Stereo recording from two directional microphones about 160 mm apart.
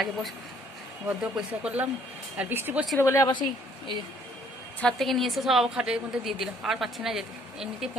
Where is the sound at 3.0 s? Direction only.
15° left (ahead or behind).